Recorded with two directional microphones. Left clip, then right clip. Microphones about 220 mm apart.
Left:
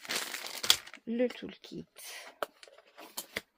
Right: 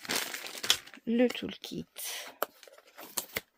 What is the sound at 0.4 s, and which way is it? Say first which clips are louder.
Crumpling: left 4 dB; 15° left (ahead or behind).